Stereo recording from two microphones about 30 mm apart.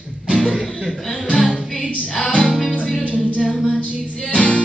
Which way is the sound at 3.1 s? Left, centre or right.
Left.